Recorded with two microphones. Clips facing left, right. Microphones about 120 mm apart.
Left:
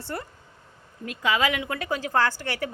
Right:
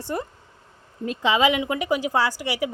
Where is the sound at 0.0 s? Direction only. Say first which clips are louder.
Right 5 dB; 20° right (ahead or behind).